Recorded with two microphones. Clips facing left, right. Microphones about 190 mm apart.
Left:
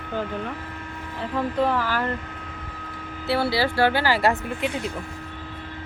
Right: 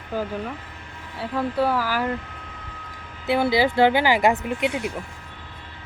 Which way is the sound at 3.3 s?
15° right (ahead or behind).